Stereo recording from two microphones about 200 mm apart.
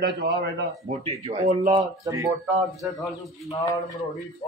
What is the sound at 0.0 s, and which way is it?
Speech, 50° right (ahead or behind).